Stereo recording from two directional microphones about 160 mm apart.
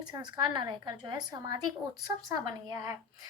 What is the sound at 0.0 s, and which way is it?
A woman's voice, 25° right (ahead or behind).